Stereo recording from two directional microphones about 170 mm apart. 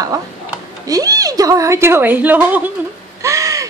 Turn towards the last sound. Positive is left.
turn(degrees=-20)  # may be behind; listen again after turning